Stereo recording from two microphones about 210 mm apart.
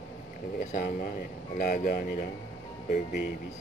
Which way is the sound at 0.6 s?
35° left (ahead or behind).